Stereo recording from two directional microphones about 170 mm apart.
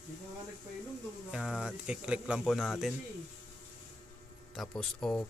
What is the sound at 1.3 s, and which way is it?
Speech, 5° right (ahead or behind).